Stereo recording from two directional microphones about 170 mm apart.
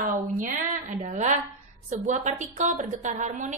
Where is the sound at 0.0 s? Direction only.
50° right (ahead or behind).